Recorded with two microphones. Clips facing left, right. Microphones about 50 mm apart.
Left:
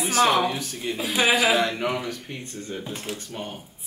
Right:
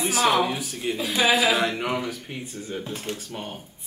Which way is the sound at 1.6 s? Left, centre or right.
Centre.